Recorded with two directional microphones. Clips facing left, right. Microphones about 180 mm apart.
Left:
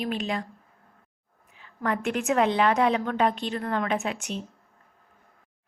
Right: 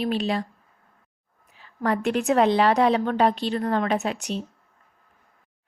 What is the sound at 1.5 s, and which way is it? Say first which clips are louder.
A woman's voice: right 4 dB; 35° right (ahead or behind).